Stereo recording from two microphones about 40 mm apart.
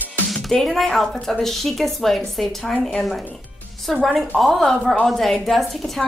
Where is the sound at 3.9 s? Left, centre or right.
Centre.